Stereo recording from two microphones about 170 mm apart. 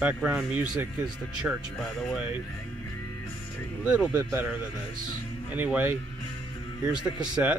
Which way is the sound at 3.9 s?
10° right (ahead or behind).